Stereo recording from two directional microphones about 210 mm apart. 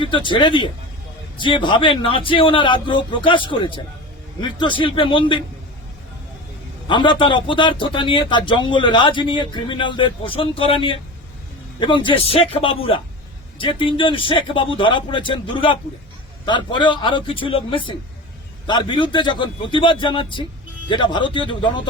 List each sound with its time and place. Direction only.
0.0 s a man's voice: 25° left (ahead or behind)
6.8 s a man's voice: 25° left (ahead or behind)